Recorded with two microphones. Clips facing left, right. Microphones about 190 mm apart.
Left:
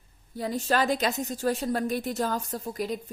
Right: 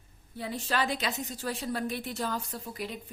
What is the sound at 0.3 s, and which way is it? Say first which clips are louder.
A woman's voice: left 5 dB; 40° left (ahead or behind).